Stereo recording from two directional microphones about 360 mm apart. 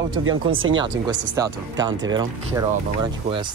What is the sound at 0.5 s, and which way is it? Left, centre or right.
Speech, right.